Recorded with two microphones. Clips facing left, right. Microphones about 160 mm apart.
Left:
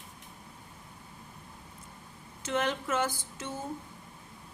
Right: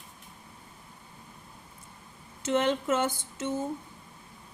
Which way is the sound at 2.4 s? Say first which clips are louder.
Right 5 dB; 25° right (ahead or behind).